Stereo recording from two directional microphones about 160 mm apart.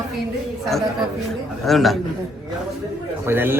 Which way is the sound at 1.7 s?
Centre (ahead or behind).